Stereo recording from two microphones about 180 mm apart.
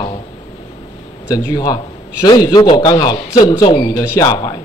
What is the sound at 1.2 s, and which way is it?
A man's voice, 20° left (ahead or behind).